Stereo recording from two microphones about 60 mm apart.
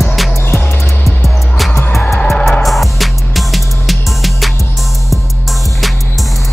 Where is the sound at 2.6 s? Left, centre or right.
Centre.